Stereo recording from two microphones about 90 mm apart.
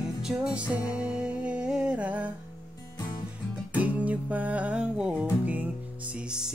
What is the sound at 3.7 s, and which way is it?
Music, 15° right (ahead or behind).